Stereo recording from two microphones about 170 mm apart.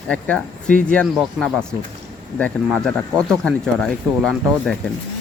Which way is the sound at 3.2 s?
5° left (ahead or behind).